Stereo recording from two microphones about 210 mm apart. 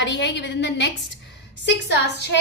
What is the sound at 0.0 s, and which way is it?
Speech, 55° left (ahead or behind).